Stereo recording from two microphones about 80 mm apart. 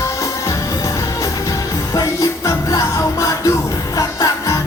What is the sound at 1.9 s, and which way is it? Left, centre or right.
Music, left.